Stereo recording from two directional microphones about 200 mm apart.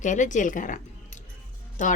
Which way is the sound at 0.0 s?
40° left (ahead or behind).